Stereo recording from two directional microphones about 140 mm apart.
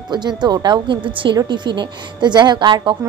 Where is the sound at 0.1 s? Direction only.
30° right (ahead or behind).